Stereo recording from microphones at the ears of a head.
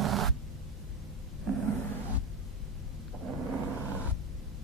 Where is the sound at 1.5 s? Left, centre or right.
Right.